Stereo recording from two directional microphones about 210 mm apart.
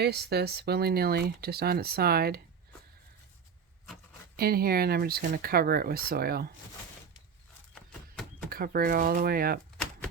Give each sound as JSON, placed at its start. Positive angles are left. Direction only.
{"t": 0.0, "sound": "speech", "side_deg": -50}
{"t": 4.4, "sound": "speech", "side_deg": -45}
{"t": 8.4, "sound": "speech", "side_deg": -45}